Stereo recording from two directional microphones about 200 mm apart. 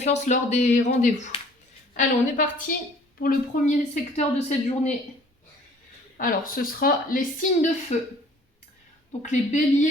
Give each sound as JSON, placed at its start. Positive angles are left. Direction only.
{"t": 0.0, "sound": "speech", "side_deg": 35}
{"t": 6.1, "sound": "a woman's voice", "side_deg": 45}
{"t": 7.9, "sound": "speech", "side_deg": 35}
{"t": 9.2, "sound": "speech", "side_deg": 35}